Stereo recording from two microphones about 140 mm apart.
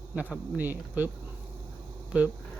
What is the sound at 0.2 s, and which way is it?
Speech, 10° right (ahead or behind).